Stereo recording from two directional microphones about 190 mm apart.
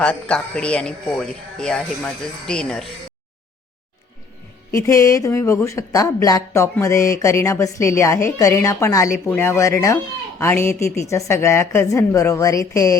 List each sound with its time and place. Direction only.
0.0 s speech: 5° left (ahead or behind)
4.7 s speech: 15° left (ahead or behind)